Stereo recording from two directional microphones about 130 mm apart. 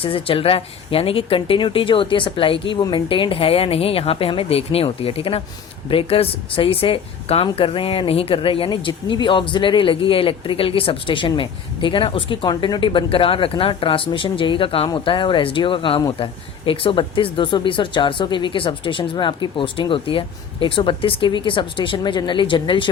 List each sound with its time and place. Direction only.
0.0 s speech: 45° left (ahead or behind)